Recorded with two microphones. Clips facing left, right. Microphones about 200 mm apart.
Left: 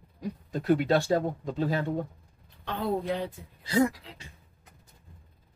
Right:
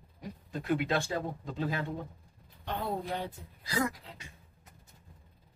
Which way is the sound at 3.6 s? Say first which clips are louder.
Left 8 dB; 25° left (ahead or behind).